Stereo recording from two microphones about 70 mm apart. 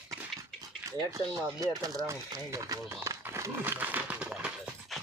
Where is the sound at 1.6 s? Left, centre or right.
Right.